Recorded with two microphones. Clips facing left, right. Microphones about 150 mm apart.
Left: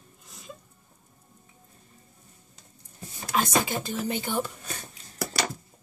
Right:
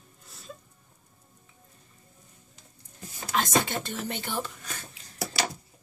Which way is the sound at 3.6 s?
5° left (ahead or behind).